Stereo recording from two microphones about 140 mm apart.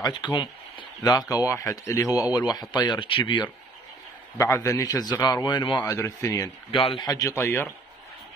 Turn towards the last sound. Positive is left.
turn(degrees=20)  # may be behind; listen again after turning